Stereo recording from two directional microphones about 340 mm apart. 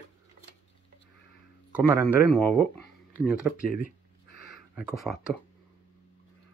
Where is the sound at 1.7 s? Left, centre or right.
Centre.